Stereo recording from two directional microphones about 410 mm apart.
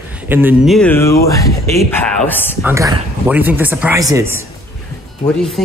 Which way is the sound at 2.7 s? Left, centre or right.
Centre.